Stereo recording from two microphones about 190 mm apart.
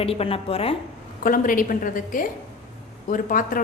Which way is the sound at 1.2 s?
45° left (ahead or behind).